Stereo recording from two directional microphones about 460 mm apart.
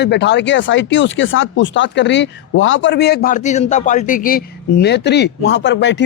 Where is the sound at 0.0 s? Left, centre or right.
Left.